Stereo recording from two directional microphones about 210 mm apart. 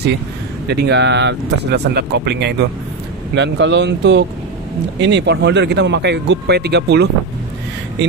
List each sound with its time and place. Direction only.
0.7 s speech: 55° right (ahead or behind)